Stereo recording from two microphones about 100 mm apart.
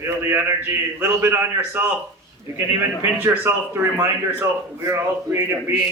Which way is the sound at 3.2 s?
20° right (ahead or behind).